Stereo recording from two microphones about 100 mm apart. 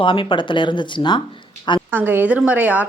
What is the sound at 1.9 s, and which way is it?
Speech, 20° right (ahead or behind).